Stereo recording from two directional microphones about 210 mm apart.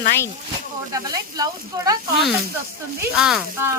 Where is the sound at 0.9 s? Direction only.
15° right (ahead or behind).